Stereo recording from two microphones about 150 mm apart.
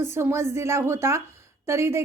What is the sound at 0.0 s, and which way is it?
A woman's voice, 15° right (ahead or behind).